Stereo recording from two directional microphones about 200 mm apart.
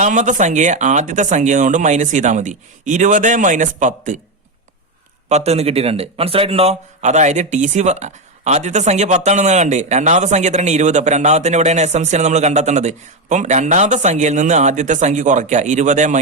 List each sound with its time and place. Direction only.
0.0 s a man's voice: 35° right (ahead or behind)
5.3 s a man's voice: 30° right (ahead or behind)